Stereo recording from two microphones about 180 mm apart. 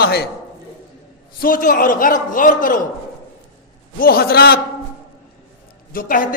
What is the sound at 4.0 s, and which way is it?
Speech, 55° left (ahead or behind).